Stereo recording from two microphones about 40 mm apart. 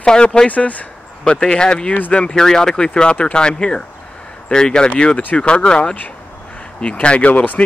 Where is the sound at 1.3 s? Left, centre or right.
Left.